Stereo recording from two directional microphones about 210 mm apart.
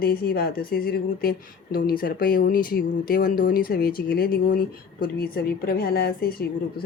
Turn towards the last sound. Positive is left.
turn(degrees=45)  # may be behind; listen again after turning